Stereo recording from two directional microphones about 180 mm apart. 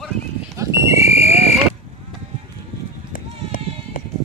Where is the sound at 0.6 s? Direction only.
15° right (ahead or behind).